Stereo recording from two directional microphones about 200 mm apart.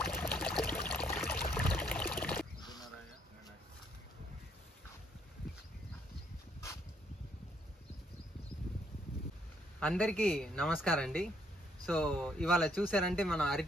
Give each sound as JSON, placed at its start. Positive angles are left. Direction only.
{"t": 0.0, "sound": "water", "side_deg": 10}
{"t": 1.1, "sound": "pour", "side_deg": 10}
{"t": 2.6, "sound": "a sound", "side_deg": 20}
{"t": 9.8, "sound": "speech", "side_deg": 5}